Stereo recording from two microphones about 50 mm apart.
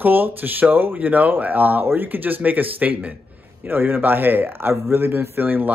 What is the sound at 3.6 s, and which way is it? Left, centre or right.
Speech, right.